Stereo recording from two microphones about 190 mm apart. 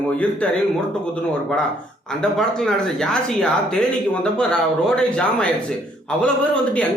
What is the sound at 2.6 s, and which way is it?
Speech, 5° left (ahead or behind).